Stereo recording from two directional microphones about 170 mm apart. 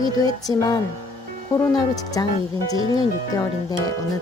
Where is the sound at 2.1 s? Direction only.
20° left (ahead or behind).